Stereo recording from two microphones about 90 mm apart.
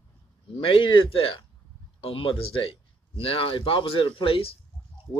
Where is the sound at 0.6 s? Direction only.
75° left (ahead or behind).